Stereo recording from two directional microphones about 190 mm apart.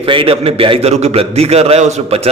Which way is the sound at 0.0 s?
30° right (ahead or behind).